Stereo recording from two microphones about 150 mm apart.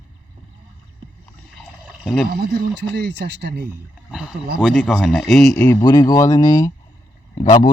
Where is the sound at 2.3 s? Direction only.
90° right.